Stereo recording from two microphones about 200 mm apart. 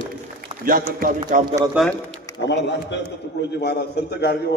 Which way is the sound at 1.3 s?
40° right (ahead or behind).